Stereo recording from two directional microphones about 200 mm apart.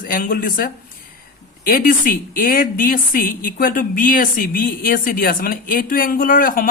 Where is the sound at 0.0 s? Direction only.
45° left (ahead or behind).